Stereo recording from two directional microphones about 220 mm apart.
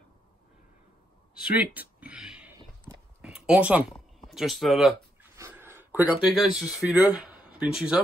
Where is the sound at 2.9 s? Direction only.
10° left (ahead or behind).